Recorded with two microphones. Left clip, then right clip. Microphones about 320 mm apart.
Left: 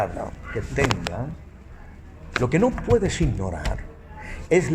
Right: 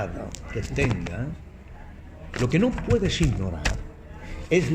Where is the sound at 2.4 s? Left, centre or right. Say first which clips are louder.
Left 2 dB; centre.